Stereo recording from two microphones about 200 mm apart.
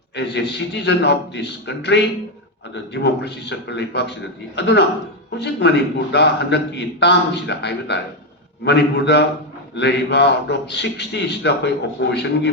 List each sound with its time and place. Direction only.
0.2 s a man's voice: 60° left (ahead or behind)